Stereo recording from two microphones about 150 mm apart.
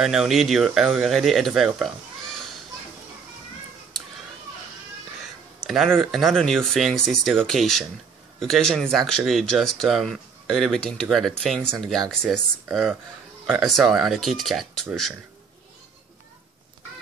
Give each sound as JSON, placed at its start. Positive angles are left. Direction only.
{"t": 0.0, "sound": "speech", "side_deg": -5}
{"t": 5.7, "sound": "speech", "side_deg": 0}